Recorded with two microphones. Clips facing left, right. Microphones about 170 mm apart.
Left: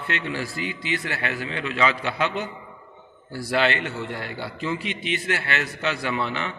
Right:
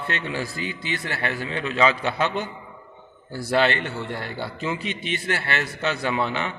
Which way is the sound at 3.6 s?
35° right (ahead or behind).